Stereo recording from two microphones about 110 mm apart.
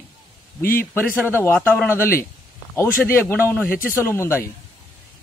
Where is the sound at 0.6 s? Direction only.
20° left (ahead or behind).